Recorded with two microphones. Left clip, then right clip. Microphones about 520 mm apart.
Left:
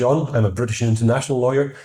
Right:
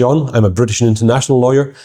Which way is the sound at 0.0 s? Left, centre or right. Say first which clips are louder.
Right 6 dB; right.